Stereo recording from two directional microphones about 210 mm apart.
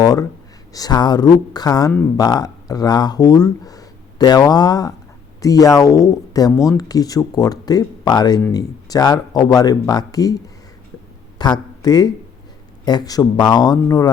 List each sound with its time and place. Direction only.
0.0 s speech: 15° left (ahead or behind)